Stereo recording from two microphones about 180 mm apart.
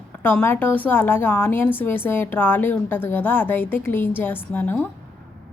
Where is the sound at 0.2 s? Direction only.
10° left (ahead or behind).